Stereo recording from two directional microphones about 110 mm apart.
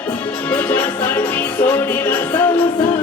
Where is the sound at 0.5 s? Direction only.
15° left (ahead or behind).